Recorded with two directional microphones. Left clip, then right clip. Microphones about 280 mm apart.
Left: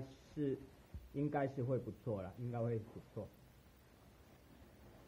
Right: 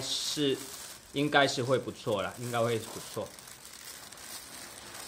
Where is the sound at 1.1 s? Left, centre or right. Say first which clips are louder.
Right 14 dB; centre.